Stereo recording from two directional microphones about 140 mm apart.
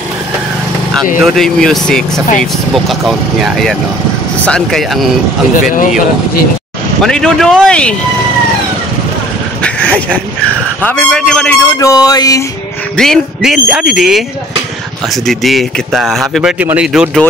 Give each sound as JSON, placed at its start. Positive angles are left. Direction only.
{"t": 1.2, "sound": "speech", "side_deg": 5}
{"t": 5.7, "sound": "speech", "side_deg": 80}
{"t": 7.0, "sound": "speech", "side_deg": 5}
{"t": 9.6, "sound": "a sound", "side_deg": 10}
{"t": 10.8, "sound": "speech", "side_deg": 10}
{"t": 11.8, "sound": "music", "side_deg": 25}
{"t": 12.9, "sound": "speech", "side_deg": 5}
{"t": 15.2, "sound": "speech", "side_deg": 0}
{"t": 16.5, "sound": "speech", "side_deg": -10}